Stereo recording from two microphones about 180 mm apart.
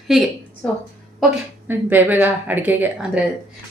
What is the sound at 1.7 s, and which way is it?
Speech, 10° right (ahead or behind).